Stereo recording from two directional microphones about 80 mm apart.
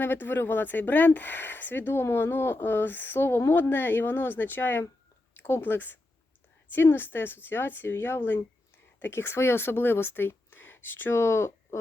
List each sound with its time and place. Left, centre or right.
0.0 s speech: left